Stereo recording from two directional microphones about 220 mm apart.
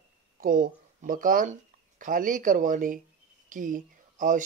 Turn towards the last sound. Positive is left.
turn(degrees=-35)  # may be behind; listen again after turning